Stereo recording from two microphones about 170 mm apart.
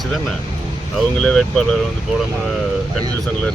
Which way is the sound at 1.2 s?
5° left (ahead or behind).